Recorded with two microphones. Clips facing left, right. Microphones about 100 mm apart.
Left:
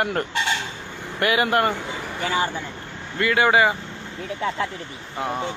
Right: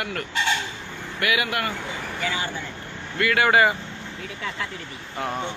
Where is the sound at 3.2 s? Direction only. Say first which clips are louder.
Left 1 dB; 20° left (ahead or behind).